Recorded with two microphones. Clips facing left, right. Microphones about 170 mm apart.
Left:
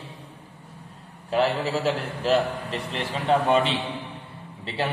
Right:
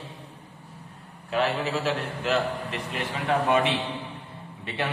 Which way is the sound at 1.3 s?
35° left (ahead or behind).